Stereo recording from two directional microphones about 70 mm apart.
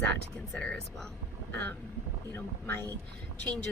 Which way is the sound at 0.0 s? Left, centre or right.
Left.